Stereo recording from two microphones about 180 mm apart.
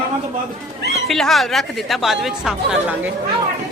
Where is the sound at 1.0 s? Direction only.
Centre (ahead or behind).